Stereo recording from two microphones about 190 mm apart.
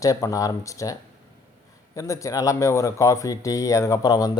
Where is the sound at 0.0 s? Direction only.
15° left (ahead or behind).